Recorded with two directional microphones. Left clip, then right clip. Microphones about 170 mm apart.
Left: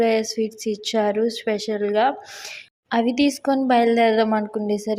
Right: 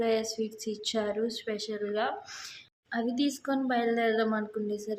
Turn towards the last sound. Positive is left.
turn(degrees=35)  # may be behind; listen again after turning